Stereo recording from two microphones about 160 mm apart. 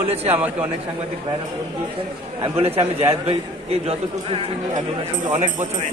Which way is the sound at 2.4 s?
35° right (ahead or behind).